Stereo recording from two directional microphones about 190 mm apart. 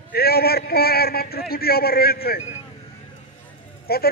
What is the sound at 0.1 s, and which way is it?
A man's voice, 55° left (ahead or behind).